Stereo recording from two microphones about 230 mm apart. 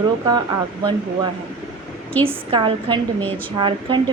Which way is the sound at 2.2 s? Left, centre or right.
Right.